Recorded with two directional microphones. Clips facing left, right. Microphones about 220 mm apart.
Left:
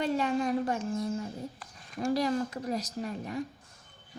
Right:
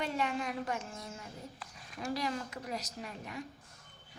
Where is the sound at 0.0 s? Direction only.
35° left (ahead or behind).